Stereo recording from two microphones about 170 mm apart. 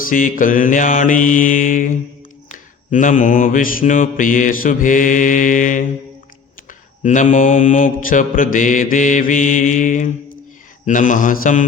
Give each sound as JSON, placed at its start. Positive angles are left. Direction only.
{"t": 0.1, "sound": "mantra", "side_deg": 55}